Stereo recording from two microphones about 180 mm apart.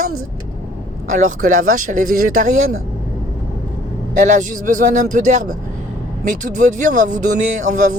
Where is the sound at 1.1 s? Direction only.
45° right (ahead or behind).